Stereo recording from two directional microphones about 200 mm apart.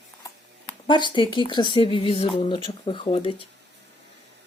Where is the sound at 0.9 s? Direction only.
25° left (ahead or behind).